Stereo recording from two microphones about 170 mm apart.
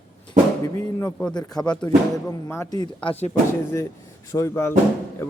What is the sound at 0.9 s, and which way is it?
Speech, 10° left (ahead or behind).